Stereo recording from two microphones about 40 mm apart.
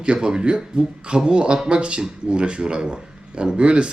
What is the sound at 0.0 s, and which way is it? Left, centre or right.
Speech, right.